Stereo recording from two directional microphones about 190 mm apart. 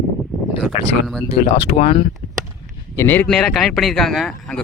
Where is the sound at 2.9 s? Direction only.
15° left (ahead or behind).